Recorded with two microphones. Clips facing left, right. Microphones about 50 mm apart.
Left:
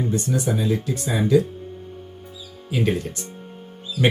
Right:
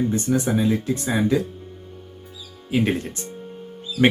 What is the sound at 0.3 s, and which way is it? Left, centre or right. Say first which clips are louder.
Speech: right 3 dB; right.